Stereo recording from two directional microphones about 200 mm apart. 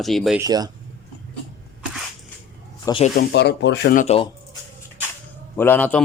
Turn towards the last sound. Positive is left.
turn(degrees=10)  # may be behind; listen again after turning